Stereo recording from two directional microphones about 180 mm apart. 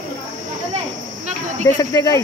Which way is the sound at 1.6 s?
20° left (ahead or behind).